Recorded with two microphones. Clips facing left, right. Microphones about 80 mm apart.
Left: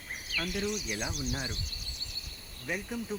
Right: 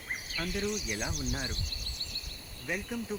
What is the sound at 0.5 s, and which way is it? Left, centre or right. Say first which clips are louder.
Speech: right 1 dB; centre.